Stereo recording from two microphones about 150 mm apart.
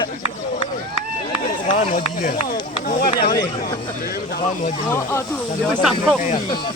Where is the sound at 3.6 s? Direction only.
90° left.